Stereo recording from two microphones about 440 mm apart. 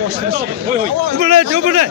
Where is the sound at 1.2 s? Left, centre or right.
Right.